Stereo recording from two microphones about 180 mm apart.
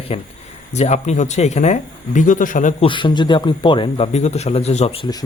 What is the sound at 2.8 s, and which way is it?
Speech, 25° left (ahead or behind).